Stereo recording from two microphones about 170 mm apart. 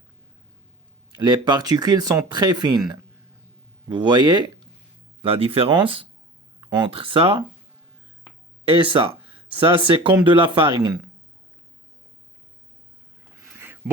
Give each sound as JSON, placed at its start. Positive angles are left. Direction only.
{"t": 1.1, "sound": "speech", "side_deg": -25}
{"t": 3.8, "sound": "speech", "side_deg": -25}
{"t": 8.8, "sound": "speech", "side_deg": -30}
{"t": 13.4, "sound": "a sound", "side_deg": -15}